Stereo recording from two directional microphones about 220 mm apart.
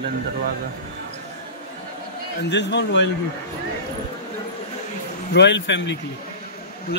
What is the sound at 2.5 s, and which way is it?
Speech, 55° left (ahead or behind).